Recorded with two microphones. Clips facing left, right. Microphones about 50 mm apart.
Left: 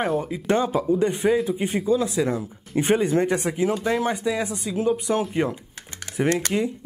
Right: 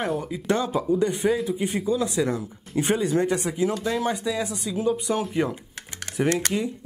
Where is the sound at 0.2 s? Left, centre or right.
Left.